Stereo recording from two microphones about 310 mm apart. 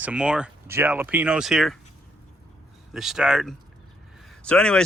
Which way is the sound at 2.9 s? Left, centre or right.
Centre.